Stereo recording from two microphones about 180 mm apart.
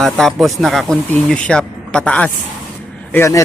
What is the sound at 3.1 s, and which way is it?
Speech, 15° left (ahead or behind).